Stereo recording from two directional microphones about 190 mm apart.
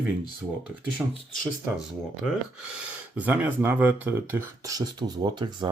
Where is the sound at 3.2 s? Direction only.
10° right (ahead or behind).